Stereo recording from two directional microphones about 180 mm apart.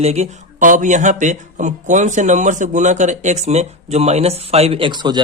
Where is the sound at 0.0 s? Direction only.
35° right (ahead or behind).